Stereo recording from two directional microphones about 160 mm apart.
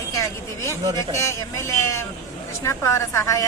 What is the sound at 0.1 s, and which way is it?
A woman's voice, 20° left (ahead or behind).